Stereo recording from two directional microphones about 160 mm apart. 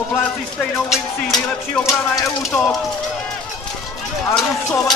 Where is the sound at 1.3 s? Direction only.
20° left (ahead or behind).